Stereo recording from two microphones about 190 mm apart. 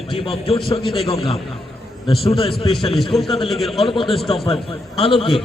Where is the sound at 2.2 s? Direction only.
30° left (ahead or behind).